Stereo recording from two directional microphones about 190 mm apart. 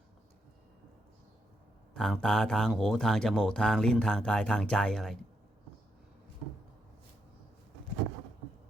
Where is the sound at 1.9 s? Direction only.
5° left (ahead or behind).